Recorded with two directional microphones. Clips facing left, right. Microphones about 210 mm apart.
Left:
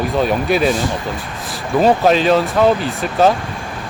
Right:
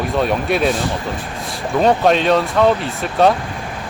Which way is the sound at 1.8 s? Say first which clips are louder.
Left 1 dB; centre (ahead or behind).